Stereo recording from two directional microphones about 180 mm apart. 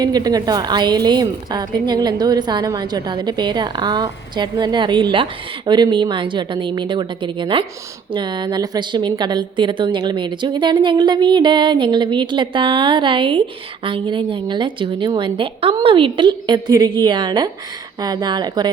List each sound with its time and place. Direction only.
0.0 s a woman's voice: 20° right (ahead or behind)